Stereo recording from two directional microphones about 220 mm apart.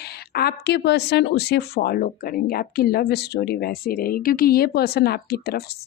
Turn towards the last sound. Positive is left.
turn(degrees=45)  # may be behind; listen again after turning